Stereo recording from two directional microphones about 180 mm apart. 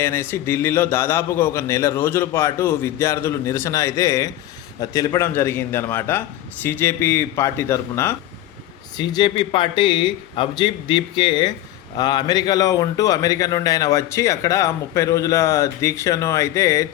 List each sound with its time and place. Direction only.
0.0 s a man's voice: 15° left (ahead or behind)